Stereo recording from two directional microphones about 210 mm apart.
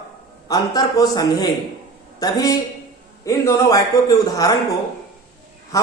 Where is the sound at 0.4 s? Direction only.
20° left (ahead or behind).